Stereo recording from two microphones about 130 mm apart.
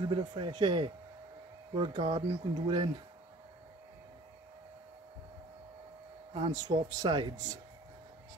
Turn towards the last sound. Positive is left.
turn(degrees=-30)  # may be behind; listen again after turning